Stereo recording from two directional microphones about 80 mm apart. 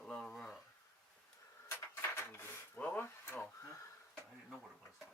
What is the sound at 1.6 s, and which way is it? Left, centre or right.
Dishes, left.